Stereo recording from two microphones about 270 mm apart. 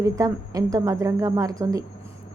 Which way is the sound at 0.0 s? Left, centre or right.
Centre.